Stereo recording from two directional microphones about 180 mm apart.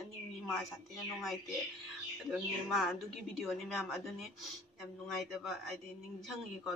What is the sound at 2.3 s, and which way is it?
A woman's voice, centre (ahead or behind).